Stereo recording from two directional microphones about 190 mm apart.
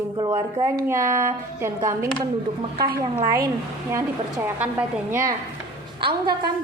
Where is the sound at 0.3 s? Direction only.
15° right (ahead or behind).